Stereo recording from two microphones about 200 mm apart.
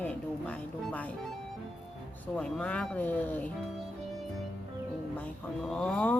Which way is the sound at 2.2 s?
5° left (ahead or behind).